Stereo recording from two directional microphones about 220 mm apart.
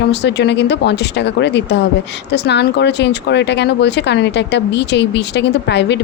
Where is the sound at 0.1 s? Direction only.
50° left (ahead or behind).